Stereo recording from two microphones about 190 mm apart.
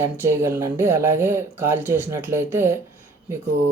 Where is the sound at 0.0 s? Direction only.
15° right (ahead or behind).